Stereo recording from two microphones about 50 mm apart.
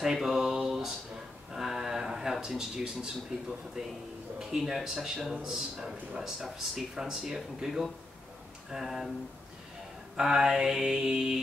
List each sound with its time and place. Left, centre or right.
0.0 s a sound: centre
3.3 s speech: centre
10.1 s speech: centre